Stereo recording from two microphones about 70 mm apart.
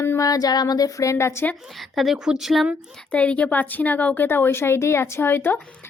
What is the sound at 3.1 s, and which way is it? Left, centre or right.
Speech, centre.